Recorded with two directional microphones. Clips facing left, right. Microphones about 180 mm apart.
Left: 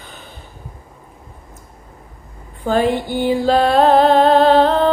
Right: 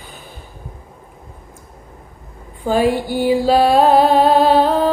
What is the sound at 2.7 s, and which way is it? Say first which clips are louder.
Music: right 1 dB; 10° right (ahead or behind).